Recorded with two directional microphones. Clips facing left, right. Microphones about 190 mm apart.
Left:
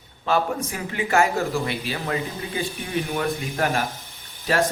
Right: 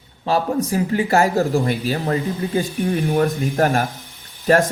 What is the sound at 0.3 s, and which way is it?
Speech, 35° right (ahead or behind).